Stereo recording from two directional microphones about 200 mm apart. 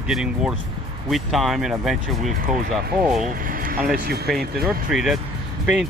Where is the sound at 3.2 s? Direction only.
45° right (ahead or behind).